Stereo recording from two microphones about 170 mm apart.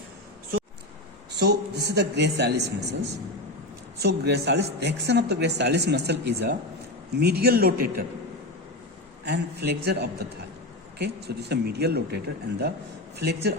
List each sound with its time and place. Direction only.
1.4 s speech: 80° right
4.0 s a man's voice: 75° right (ahead or behind)
9.2 s speech: 75° right (ahead or behind)